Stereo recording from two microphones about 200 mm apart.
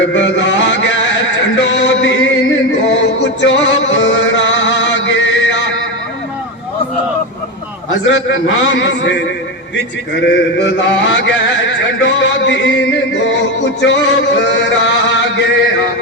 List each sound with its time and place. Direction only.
0.0 s music: 65° left (ahead or behind)
1.5 s a sound: 60° left (ahead or behind)
3.2 s music: 60° left (ahead or behind)
8.0 s a man's voice: 70° left (ahead or behind)
10.2 s a man's voice: 60° left (ahead or behind)
12.0 s music: 65° left (ahead or behind)
13.8 s chant: 60° left (ahead or behind)